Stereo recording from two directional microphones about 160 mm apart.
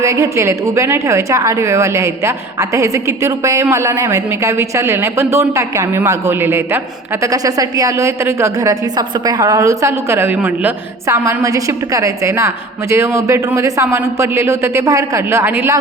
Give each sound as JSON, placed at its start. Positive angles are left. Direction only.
{"t": 0.0, "sound": "a woman's voice", "side_deg": -20}